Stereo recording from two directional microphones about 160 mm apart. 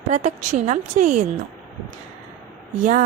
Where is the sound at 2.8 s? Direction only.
50° right (ahead or behind).